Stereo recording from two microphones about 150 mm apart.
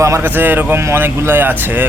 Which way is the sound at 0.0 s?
15° right (ahead or behind).